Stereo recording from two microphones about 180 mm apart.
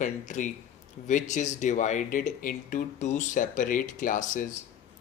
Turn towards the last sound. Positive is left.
turn(degrees=45)  # may be behind; listen again after turning